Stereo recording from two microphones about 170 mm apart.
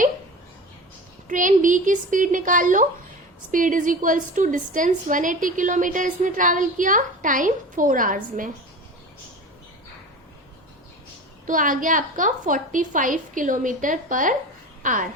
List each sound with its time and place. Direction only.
1.3 s a woman's voice: 50° right (ahead or behind)
11.4 s a woman's voice: 50° right (ahead or behind)